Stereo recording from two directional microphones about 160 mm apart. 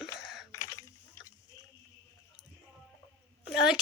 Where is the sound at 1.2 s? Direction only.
15° left (ahead or behind).